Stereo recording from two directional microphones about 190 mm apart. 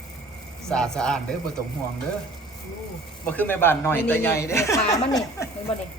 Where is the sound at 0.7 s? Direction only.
5° left (ahead or behind).